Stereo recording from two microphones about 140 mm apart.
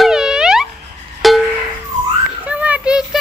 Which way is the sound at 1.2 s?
Centre (ahead or behind).